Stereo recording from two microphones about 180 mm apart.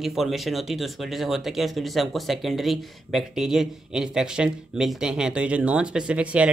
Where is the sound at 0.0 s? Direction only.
Centre (ahead or behind).